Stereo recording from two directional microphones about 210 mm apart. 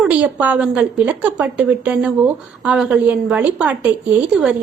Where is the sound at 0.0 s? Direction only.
5° right (ahead or behind).